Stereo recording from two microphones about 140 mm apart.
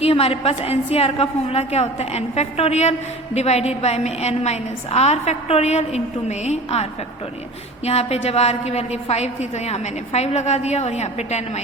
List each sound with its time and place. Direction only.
0.0 s a woman's voice: 45° left (ahead or behind)
7.9 s a woman's voice: 50° left (ahead or behind)